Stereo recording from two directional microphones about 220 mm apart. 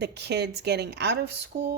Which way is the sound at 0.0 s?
50° right (ahead or behind).